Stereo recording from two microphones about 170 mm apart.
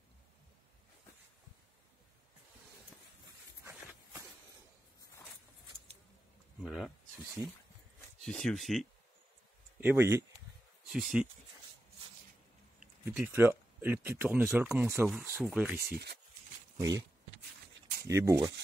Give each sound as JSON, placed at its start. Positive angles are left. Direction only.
{"t": 6.6, "sound": "speech", "side_deg": 0}
{"t": 8.2, "sound": "speech", "side_deg": 5}
{"t": 9.8, "sound": "speech", "side_deg": -10}
{"t": 13.1, "sound": "speech", "side_deg": -10}
{"t": 18.0, "sound": "speech", "side_deg": -15}